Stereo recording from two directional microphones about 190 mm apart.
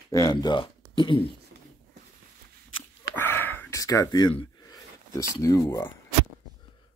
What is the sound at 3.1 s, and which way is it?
Gasp, 10° left (ahead or behind).